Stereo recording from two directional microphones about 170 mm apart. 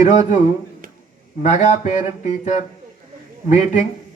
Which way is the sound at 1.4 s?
40° left (ahead or behind).